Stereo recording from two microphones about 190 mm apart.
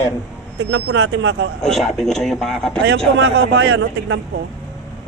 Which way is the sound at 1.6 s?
Centre (ahead or behind).